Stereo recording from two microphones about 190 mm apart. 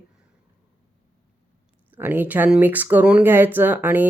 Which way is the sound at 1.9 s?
10° right (ahead or behind).